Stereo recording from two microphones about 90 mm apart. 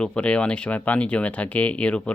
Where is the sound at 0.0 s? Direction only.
10° left (ahead or behind).